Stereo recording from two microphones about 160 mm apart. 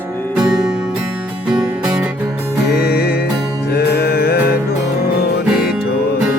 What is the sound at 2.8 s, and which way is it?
Music, 80° left.